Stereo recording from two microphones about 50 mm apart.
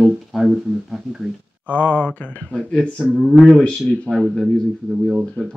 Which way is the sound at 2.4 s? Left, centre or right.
Centre.